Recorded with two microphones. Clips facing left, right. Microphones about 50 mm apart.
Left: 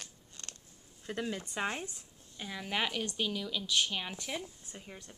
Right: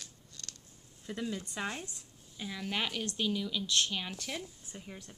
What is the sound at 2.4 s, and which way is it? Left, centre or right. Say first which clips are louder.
Speech: left 1 dB; centre.